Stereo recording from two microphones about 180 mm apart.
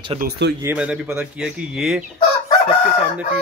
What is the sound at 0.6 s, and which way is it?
Speech, 10° right (ahead or behind).